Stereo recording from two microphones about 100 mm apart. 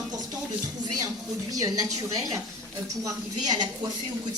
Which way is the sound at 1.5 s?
35° right (ahead or behind).